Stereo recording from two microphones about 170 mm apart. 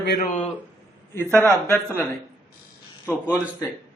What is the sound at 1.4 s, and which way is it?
Speech, 15° right (ahead or behind).